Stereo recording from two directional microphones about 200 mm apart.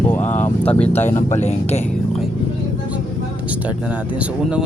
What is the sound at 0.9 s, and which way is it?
Speech, 35° left (ahead or behind).